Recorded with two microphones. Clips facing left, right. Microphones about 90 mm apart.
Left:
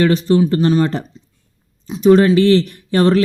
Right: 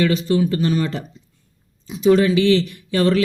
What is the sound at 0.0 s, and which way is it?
Speech, 35° left (ahead or behind).